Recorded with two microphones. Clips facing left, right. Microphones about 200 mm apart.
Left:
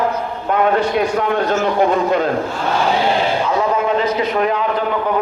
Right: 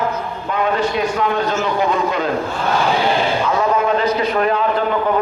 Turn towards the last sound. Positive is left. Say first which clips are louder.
# even
turn(degrees=20)  # may be behind; listen again after turning